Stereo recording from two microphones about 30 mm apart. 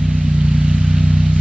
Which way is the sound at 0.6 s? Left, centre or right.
Right.